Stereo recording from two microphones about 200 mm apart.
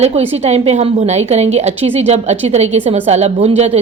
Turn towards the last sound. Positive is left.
turn(degrees=-35)  # may be behind; listen again after turning